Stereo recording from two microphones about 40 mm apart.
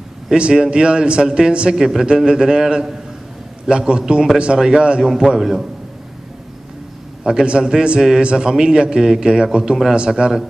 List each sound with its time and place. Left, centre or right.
0.4 s a man's voice: right
1.8 s a man's voice: centre
5.0 s speech: centre
7.2 s a man's voice: right